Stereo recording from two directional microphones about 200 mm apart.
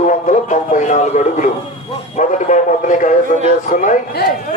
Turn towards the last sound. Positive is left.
turn(degrees=45)  # may be behind; listen again after turning